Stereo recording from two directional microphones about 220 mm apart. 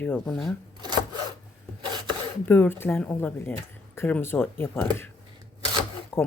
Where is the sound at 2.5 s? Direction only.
10° left (ahead or behind).